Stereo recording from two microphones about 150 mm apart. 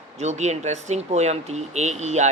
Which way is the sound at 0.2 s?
50° right (ahead or behind).